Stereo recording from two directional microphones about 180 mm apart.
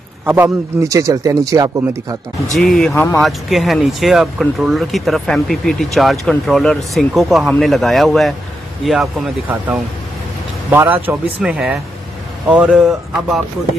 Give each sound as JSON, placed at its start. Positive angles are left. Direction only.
{"t": 0.2, "sound": "a man's voice", "side_deg": -10}
{"t": 2.6, "sound": "speech", "side_deg": 0}
{"t": 3.2, "sound": "a man's voice", "side_deg": 0}